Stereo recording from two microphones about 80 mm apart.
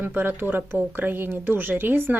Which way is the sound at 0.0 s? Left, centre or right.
Right.